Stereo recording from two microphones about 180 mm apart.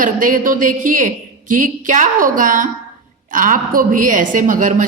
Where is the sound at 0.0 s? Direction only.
50° right (ahead or behind).